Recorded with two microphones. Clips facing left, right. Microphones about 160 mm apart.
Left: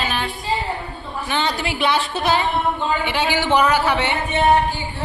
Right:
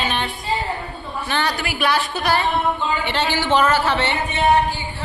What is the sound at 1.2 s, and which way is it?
A woman's voice, 20° left (ahead or behind).